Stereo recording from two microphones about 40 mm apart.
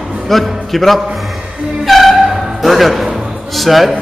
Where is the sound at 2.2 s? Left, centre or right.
Centre.